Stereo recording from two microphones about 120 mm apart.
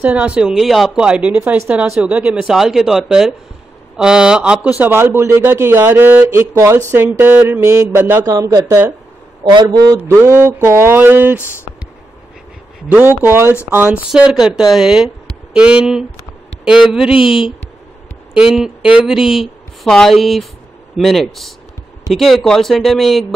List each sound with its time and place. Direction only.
0.0 s a man's voice: 10° right (ahead or behind); by 9.9 s 35° right (ahead or behind)
9.9 s speech: 20° right (ahead or behind)
12.8 s speech: 15° right (ahead or behind)
13.8 s speech: 5° right (ahead or behind)